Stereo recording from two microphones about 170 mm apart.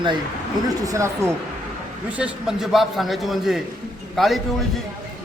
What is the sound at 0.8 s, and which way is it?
Speech, 20° right (ahead or behind).